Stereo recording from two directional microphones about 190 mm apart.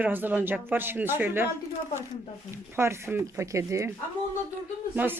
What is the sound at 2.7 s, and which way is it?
Speech, 15° right (ahead or behind).